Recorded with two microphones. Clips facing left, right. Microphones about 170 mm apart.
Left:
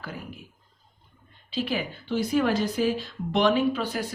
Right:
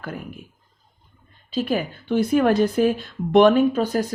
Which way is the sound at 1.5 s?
50° right (ahead or behind).